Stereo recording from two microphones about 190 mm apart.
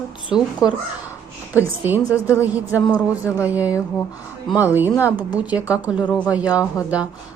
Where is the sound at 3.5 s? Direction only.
10° right (ahead or behind).